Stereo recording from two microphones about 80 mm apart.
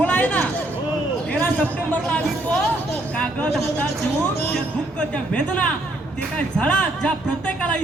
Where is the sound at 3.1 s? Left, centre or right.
Centre.